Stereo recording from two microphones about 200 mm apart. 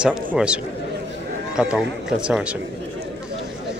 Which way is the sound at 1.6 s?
5° right (ahead or behind).